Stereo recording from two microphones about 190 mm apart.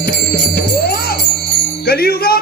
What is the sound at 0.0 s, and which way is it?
Music, 55° left (ahead or behind).